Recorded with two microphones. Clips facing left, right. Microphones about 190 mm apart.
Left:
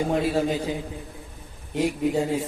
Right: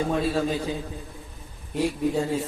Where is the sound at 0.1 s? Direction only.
15° left (ahead or behind).